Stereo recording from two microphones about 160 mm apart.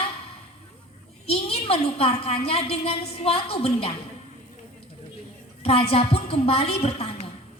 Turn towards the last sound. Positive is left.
turn(degrees=40)  # may be behind; listen again after turning